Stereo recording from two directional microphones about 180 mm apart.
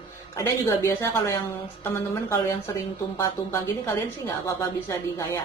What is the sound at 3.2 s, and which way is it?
Speech, 15° left (ahead or behind).